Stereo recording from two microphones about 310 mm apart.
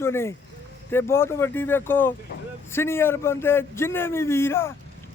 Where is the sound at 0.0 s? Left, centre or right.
Centre.